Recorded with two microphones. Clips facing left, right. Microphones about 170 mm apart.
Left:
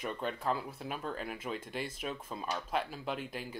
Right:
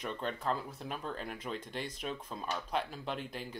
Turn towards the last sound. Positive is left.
turn(degrees=5)  # may be behind; listen again after turning